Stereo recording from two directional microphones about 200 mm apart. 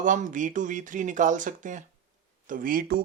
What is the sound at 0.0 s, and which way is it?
Speech, 40° right (ahead or behind).